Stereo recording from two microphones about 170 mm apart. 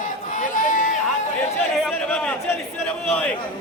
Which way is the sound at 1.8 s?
5° left (ahead or behind).